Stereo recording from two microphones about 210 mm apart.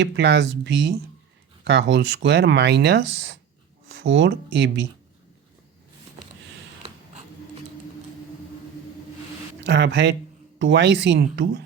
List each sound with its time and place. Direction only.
0.0 s speech: 55° right (ahead or behind)
9.6 s speech: 55° right (ahead or behind)